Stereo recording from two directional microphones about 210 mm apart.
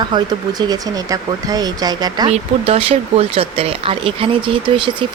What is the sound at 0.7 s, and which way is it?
Speech, 15° right (ahead or behind).